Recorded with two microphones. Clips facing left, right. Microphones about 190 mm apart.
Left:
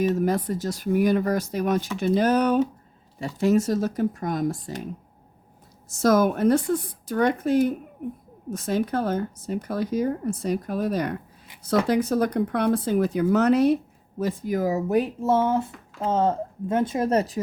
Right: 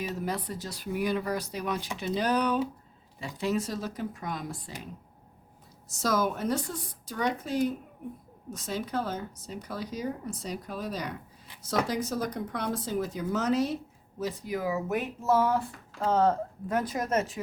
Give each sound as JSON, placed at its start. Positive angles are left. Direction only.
{"t": 0.1, "sound": "speech", "side_deg": 50}
{"t": 5.9, "sound": "speech", "side_deg": 50}
{"t": 14.2, "sound": "speech", "side_deg": 50}